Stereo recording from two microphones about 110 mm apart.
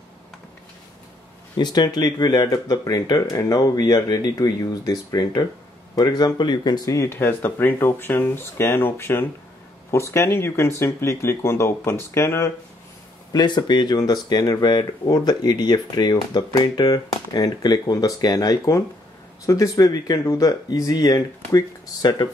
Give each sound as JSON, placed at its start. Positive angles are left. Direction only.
{"t": 1.6, "sound": "speech", "side_deg": 40}
{"t": 13.3, "sound": "speech", "side_deg": 35}